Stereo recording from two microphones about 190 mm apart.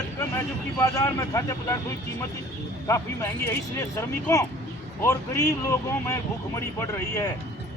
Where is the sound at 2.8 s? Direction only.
15° left (ahead or behind).